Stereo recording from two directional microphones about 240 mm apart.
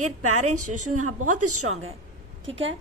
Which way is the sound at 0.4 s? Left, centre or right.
Right.